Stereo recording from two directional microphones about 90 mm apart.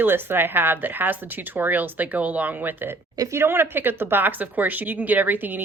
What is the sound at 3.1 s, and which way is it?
Speech, 35° right (ahead or behind).